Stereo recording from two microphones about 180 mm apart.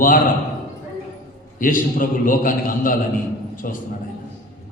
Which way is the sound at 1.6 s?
50° left (ahead or behind).